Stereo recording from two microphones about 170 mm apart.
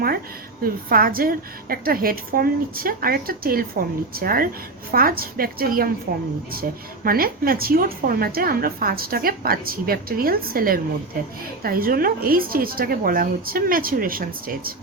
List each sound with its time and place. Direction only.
0.6 s a woman's voice: 60° right (ahead or behind)